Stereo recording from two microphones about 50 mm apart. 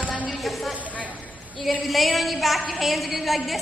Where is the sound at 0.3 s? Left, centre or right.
Centre.